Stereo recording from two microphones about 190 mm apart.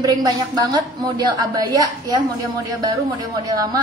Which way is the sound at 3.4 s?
20° right (ahead or behind).